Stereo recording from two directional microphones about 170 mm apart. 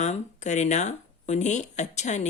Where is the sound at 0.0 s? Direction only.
45° left (ahead or behind).